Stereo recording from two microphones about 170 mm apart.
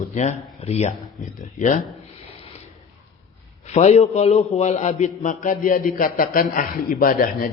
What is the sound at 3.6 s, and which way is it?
A man's voice, 40° left (ahead or behind).